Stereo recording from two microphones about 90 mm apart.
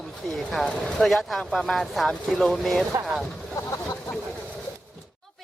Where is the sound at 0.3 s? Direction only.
5° left (ahead or behind).